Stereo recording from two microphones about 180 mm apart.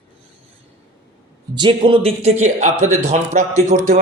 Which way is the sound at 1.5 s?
25° right (ahead or behind).